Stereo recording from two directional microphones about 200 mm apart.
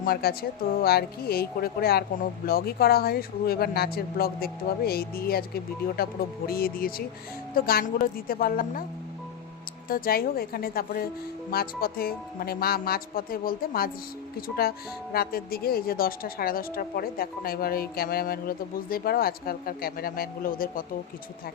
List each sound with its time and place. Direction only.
0.0 s a woman's voice: 50° left (ahead or behind)
9.9 s a woman's voice: 45° left (ahead or behind)